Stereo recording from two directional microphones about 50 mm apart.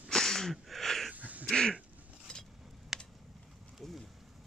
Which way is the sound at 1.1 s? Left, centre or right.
Right.